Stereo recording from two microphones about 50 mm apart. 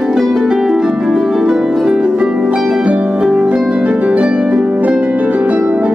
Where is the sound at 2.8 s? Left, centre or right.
Right.